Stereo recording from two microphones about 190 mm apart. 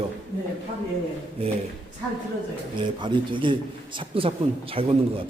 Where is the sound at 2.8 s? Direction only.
25° right (ahead or behind).